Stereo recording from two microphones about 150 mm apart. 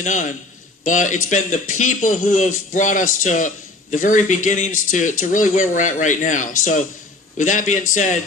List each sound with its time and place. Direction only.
0.0 s a man's voice: 55° left (ahead or behind)